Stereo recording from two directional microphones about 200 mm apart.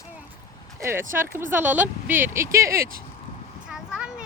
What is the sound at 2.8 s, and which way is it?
Speech, 45° right (ahead or behind).